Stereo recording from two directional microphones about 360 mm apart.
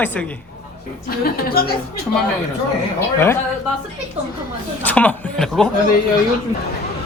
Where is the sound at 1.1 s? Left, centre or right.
Left.